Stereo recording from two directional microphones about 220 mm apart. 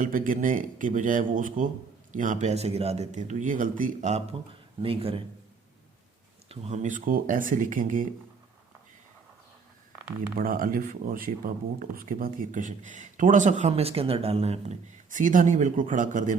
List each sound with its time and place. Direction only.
0.0 s a man's voice: 35° right (ahead or behind)
6.5 s speech: 30° right (ahead or behind)
10.3 s speech: 40° right (ahead or behind)